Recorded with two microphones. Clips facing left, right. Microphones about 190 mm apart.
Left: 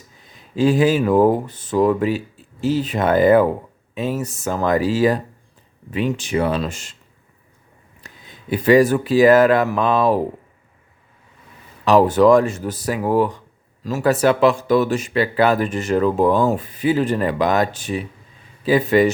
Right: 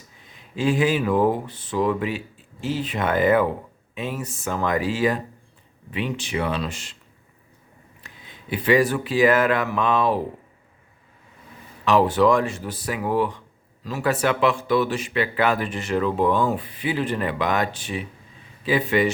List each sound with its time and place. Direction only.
0.3 s speech: 40° left (ahead or behind)
8.0 s speech: 40° left (ahead or behind)
11.9 s speech: 40° left (ahead or behind)